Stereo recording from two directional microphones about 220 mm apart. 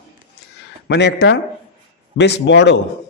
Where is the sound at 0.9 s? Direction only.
50° left (ahead or behind).